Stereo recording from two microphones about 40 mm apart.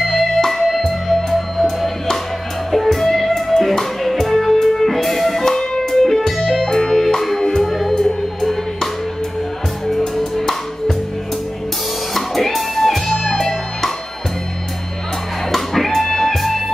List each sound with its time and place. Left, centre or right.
0.0 s music: centre
7.9 s music: centre
9.8 s music: centre
12.1 s music: centre
15.5 s music: centre